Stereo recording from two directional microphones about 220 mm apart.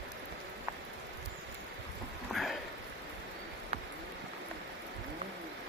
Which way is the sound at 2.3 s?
Centre (ahead or behind).